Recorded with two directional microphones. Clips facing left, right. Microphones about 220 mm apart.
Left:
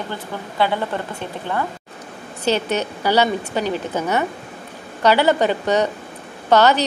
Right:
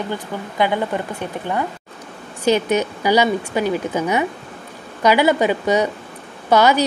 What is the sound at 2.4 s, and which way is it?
A woman's voice, 10° right (ahead or behind).